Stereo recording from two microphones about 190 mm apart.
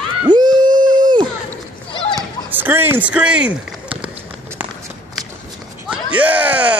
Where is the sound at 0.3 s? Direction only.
25° right (ahead or behind).